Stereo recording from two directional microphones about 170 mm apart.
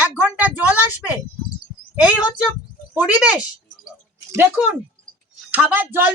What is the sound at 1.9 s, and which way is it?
Speech, 10° right (ahead or behind).